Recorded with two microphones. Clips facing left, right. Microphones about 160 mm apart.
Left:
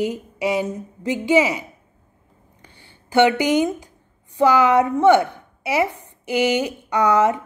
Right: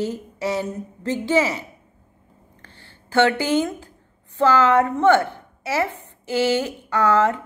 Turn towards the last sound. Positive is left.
turn(degrees=15)  # may be behind; listen again after turning